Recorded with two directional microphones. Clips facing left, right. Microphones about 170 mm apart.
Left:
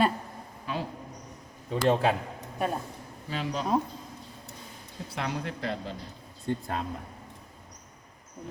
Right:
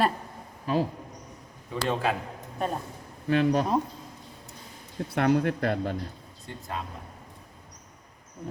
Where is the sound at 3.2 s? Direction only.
60° right (ahead or behind).